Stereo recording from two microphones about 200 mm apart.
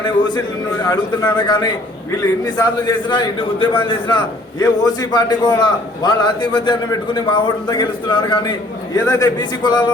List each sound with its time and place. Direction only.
0.0 s a man's voice: 20° left (ahead or behind)